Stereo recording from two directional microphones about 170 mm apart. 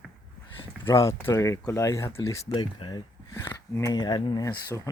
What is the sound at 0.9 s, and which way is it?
Speech, 15° left (ahead or behind).